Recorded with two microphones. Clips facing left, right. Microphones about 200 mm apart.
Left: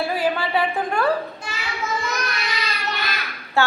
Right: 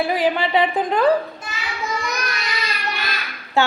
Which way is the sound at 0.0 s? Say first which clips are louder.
Right 3 dB; 15° right (ahead or behind).